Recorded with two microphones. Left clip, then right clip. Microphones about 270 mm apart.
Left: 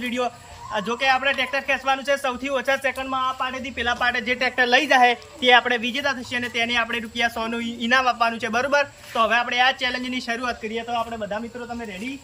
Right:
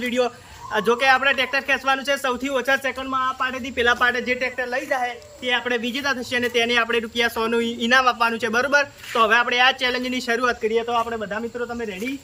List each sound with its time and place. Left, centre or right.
0.0 s a man's voice: centre
4.1 s a woman's voice: centre
5.6 s a man's voice: centre